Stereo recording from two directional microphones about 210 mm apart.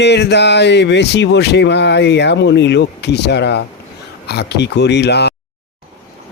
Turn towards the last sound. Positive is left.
turn(degrees=55)  # may be behind; listen again after turning